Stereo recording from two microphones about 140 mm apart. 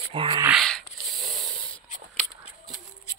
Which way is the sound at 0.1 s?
40° right (ahead or behind).